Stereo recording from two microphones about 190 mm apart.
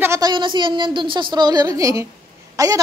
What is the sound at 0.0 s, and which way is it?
A woman's voice, 15° right (ahead or behind).